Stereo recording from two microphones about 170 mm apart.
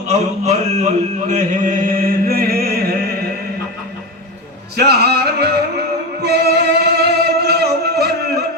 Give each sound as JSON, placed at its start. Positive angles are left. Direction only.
{"t": 0.1, "sound": "chant", "side_deg": -40}
{"t": 4.8, "sound": "music", "side_deg": -70}